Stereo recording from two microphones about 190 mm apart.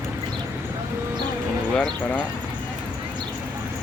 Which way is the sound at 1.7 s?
5° left (ahead or behind).